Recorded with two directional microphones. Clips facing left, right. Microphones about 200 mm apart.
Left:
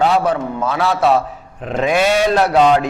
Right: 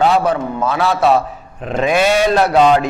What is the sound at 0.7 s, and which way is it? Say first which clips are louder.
Speech: right 1 dB; 10° right (ahead or behind).